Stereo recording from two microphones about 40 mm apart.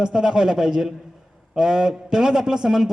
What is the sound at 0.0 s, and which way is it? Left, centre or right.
A man's voice, centre.